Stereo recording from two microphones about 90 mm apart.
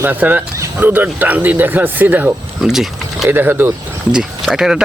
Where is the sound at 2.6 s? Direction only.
5° right (ahead or behind).